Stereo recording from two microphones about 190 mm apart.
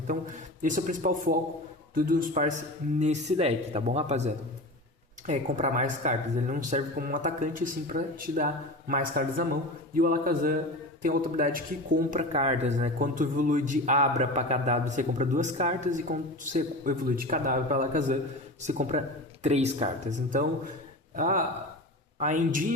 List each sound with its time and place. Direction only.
0.6 s a man's voice: 45° right (ahead or behind)
12.3 s a man's voice: 35° right (ahead or behind)